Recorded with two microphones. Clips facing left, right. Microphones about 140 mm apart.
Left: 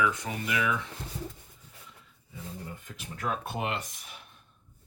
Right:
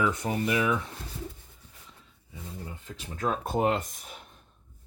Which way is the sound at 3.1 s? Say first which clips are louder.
Right 5 dB; 30° right (ahead or behind).